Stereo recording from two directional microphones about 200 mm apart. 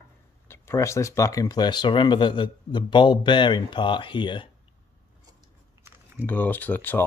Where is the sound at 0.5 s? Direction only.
15° left (ahead or behind).